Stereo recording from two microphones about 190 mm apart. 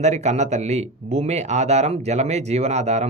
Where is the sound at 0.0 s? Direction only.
35° right (ahead or behind).